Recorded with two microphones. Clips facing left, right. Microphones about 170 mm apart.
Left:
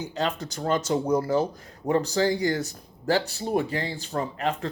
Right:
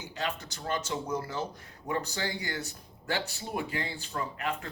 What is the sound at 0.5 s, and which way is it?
Speech, 40° left (ahead or behind).